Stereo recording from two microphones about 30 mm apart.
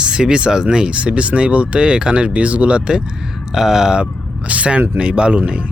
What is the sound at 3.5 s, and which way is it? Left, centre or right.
Speech, centre.